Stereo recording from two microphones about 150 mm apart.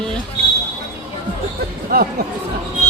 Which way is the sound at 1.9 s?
75° right (ahead or behind).